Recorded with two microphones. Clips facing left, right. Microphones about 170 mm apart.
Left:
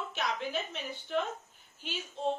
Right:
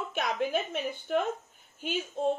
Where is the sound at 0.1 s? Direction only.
50° right (ahead or behind).